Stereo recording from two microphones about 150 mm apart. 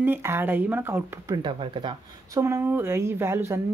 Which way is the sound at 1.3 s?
30° right (ahead or behind).